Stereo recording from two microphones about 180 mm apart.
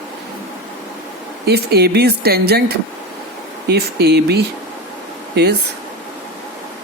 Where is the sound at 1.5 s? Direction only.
65° right (ahead or behind).